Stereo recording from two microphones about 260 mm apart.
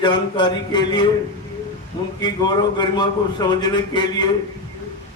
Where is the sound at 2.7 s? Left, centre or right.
Centre.